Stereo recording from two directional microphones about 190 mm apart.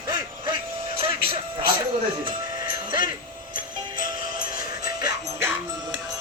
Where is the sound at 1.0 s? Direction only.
30° right (ahead or behind).